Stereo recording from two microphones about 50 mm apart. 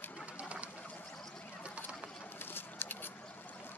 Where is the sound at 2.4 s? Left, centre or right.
Left.